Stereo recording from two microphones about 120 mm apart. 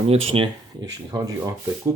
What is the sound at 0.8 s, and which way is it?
Speech, 30° right (ahead or behind).